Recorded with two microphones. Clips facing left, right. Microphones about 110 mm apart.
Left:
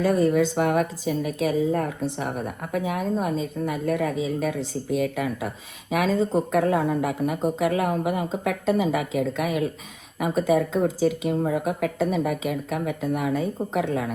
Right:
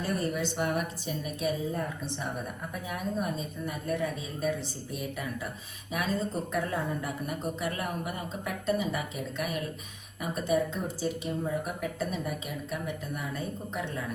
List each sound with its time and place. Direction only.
0.3 s speech: 90° left